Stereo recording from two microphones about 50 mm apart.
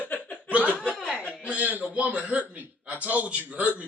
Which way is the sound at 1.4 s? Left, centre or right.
Right.